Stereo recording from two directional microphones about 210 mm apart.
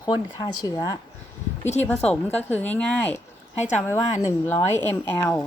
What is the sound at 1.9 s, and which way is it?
Speech, 5° left (ahead or behind).